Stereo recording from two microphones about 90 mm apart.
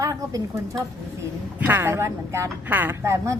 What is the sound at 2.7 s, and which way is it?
Speech, 20° right (ahead or behind).